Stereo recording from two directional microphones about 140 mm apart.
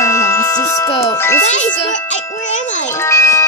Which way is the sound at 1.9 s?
60° left (ahead or behind).